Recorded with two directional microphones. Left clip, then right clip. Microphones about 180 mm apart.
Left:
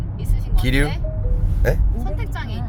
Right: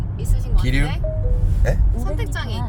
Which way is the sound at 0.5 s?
60° left (ahead or behind).